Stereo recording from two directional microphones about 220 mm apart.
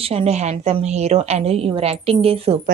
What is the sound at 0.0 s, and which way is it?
A woman's voice, 25° right (ahead or behind).